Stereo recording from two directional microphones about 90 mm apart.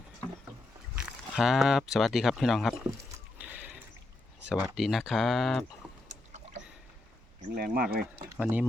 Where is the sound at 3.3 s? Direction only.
15° right (ahead or behind).